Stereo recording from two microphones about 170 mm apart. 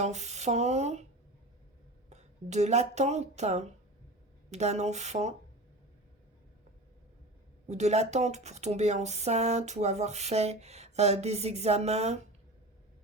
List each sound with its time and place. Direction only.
0.0 s speech: 40° right (ahead or behind)
2.0 s speech: 40° right (ahead or behind)
7.7 s speech: 40° right (ahead or behind)